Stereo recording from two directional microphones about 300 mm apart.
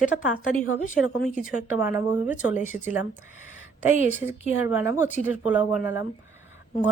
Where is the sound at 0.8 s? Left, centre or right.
Left.